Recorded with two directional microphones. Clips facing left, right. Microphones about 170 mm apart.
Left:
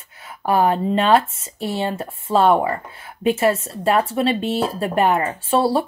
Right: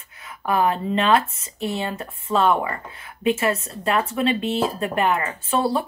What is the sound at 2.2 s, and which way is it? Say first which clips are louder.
Speech: left 4 dB; 35° left (ahead or behind).